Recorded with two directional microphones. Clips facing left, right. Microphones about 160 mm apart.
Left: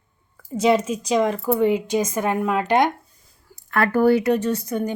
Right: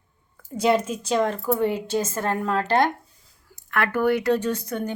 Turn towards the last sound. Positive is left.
turn(degrees=10)  # may be behind; listen again after turning